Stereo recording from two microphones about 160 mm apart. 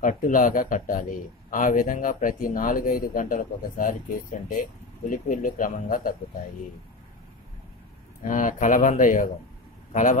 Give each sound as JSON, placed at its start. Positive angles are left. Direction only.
{"t": 0.0, "sound": "a man's voice", "side_deg": 55}
{"t": 8.2, "sound": "a man's voice", "side_deg": 55}